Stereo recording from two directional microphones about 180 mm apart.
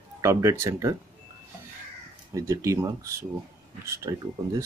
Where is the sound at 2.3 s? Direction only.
15° right (ahead or behind).